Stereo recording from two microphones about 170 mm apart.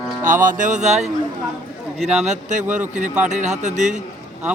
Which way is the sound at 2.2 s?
45° right (ahead or behind).